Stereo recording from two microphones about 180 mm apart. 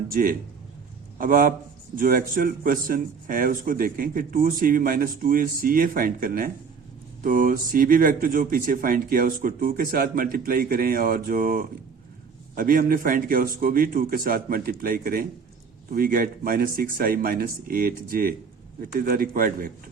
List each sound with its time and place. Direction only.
0.1 s speech: 50° right (ahead or behind)